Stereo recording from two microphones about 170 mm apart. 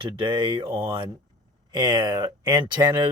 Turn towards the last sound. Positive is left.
turn(degrees=-25)  # may be behind; listen again after turning